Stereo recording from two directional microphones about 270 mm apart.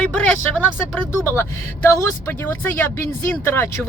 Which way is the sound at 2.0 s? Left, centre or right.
Centre.